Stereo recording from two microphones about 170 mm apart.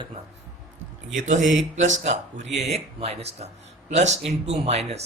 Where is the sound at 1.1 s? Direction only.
50° right (ahead or behind).